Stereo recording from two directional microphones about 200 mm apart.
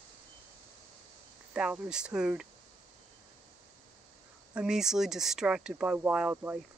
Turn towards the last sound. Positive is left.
turn(degrees=-10)  # may be behind; listen again after turning